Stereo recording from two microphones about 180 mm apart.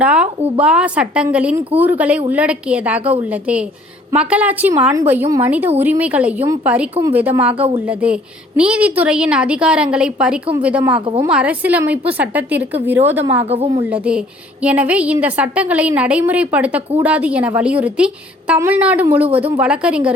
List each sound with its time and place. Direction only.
0.0 s a woman's voice: 5° right (ahead or behind)
13.4 s a woman's voice: 35° right (ahead or behind)
13.9 s a woman's voice: 5° right (ahead or behind)